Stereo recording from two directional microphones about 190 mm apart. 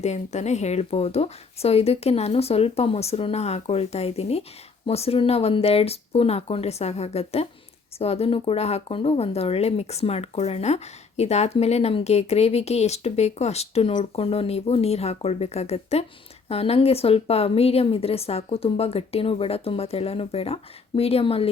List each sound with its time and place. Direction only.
0.0 s speech: 35° left (ahead or behind)